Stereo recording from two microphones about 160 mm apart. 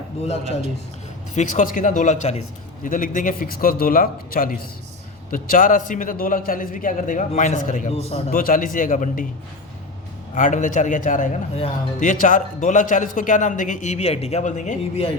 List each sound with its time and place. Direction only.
1.3 s speech: 50° left (ahead or behind)
2.8 s a man's voice: 55° left (ahead or behind)
7.9 s a man's voice: 40° left (ahead or behind)
8.4 s a man's voice: 60° left (ahead or behind)
10.3 s speech: 55° left (ahead or behind)